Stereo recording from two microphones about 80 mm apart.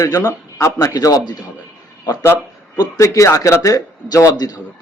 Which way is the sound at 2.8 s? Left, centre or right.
Left.